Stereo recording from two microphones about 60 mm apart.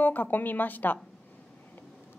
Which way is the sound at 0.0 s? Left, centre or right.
Left.